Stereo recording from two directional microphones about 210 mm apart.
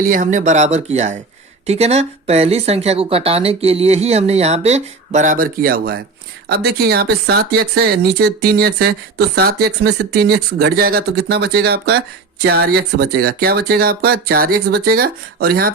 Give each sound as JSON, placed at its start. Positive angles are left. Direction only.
{"t": 0.0, "sound": "speech", "side_deg": -40}